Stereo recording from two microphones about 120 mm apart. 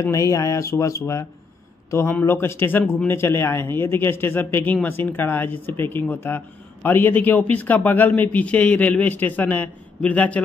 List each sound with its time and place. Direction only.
0.0 s a man's voice: 25° left (ahead or behind)